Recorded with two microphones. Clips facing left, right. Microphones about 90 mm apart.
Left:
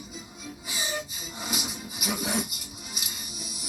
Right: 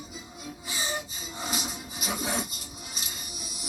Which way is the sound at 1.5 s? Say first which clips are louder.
Left 2 dB; 35° right (ahead or behind).